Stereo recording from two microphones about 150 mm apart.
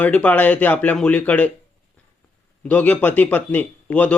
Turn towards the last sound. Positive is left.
turn(degrees=10)  # may be behind; listen again after turning